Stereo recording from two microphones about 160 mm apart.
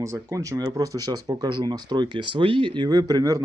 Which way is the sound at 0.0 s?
20° right (ahead or behind).